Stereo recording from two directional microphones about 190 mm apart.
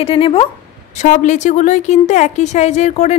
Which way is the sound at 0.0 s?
30° left (ahead or behind).